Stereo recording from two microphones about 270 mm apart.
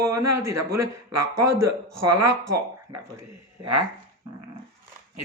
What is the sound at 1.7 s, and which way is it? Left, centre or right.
Speech, right.